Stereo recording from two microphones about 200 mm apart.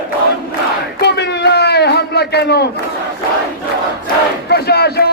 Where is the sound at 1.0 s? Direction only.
55° left (ahead or behind).